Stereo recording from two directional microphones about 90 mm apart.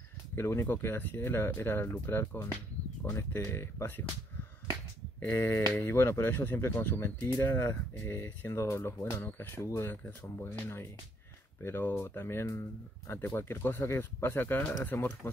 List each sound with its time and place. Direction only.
0.4 s speech: 30° left (ahead or behind)
5.2 s speech: 25° left (ahead or behind)